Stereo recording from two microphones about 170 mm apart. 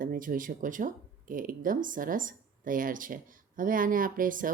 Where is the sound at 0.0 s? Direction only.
55° right (ahead or behind).